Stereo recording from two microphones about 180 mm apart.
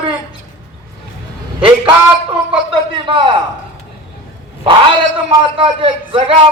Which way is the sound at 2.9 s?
30° right (ahead or behind).